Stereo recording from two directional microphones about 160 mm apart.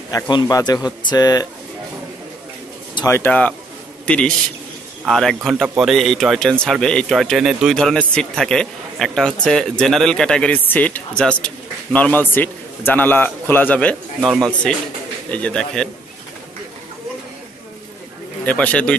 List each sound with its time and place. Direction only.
0.1 s a man's voice: 25° left (ahead or behind)
3.1 s a man's voice: 10° left (ahead or behind)
18.4 s speech: 10° left (ahead or behind)